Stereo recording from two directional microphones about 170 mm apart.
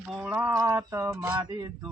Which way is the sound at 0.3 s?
10° right (ahead or behind).